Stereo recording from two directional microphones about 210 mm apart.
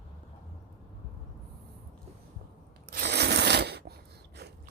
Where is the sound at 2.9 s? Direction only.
50° right (ahead or behind).